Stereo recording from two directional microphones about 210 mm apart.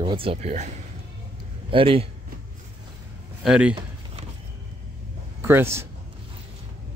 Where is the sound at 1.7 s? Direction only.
25° right (ahead or behind).